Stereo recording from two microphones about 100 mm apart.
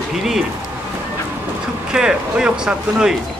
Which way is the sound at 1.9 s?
10° right (ahead or behind).